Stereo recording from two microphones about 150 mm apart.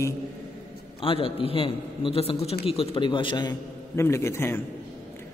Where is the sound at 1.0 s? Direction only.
40° left (ahead or behind).